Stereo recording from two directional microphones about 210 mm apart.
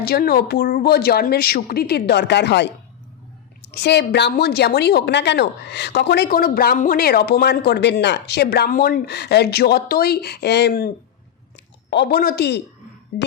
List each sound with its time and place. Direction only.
0.0 s a woman's voice: 45° left (ahead or behind)